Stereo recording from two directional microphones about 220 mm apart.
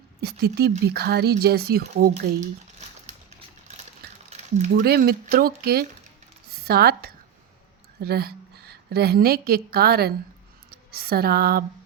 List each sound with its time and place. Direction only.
0.2 s speech: 45° right (ahead or behind)
4.3 s a sound: 30° right (ahead or behind)
4.7 s a woman's voice: 45° right (ahead or behind)